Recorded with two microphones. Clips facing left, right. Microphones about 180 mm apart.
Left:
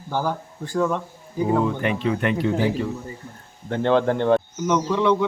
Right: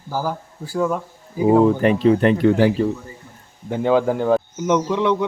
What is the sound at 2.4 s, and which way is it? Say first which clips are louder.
Speech: right 6 dB; 65° right (ahead or behind).